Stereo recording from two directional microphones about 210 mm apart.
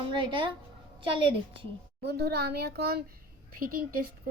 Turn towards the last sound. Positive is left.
turn(degrees=-45)  # may be behind; listen again after turning